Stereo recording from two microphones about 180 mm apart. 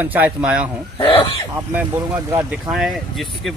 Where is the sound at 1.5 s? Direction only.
10° right (ahead or behind).